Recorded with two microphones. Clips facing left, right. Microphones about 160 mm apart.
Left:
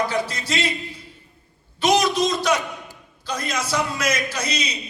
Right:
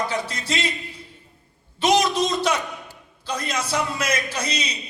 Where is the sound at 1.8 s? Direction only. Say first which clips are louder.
Left 1 dB; 30° right (ahead or behind).